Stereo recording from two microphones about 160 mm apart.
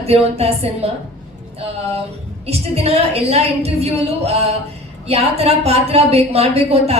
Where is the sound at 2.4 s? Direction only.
40° right (ahead or behind).